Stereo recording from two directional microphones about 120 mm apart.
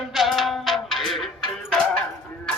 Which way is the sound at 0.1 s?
Centre (ahead or behind).